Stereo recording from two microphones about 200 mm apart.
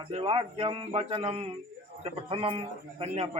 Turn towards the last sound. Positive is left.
turn(degrees=-30)  # may be behind; listen again after turning